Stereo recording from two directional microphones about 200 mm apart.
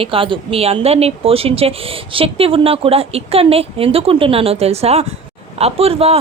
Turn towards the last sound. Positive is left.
turn(degrees=-30)  # may be behind; listen again after turning